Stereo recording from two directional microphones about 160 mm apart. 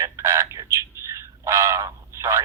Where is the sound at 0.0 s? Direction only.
15° right (ahead or behind).